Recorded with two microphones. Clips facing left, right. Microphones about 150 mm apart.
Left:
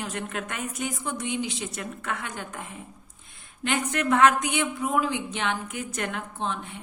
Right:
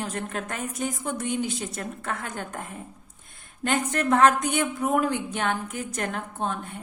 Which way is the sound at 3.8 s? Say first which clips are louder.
Even; 40° right (ahead or behind).